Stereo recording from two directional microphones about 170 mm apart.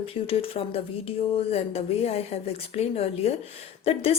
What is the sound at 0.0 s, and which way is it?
A woman's voice, 35° left (ahead or behind).